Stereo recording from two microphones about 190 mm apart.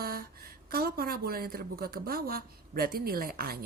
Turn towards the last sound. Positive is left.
turn(degrees=-50)  # may be behind; listen again after turning